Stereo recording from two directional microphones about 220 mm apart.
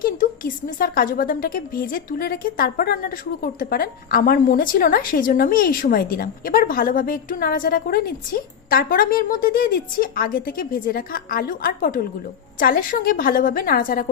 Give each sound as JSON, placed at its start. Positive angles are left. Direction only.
{"t": 0.0, "sound": "speech", "side_deg": 40}